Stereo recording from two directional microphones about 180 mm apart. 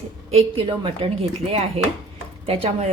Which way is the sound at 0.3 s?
35° right (ahead or behind).